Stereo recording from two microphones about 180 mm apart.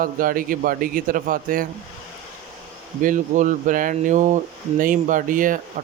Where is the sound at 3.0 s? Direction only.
45° right (ahead or behind).